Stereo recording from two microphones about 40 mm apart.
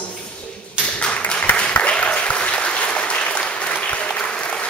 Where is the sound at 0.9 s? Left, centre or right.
Left.